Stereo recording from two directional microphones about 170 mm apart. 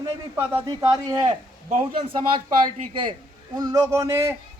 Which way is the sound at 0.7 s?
25° right (ahead or behind).